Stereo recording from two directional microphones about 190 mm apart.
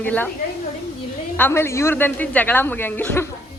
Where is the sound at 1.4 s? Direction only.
15° left (ahead or behind).